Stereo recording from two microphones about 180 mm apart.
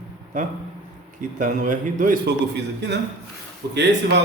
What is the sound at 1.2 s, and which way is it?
Speech, 45° right (ahead or behind).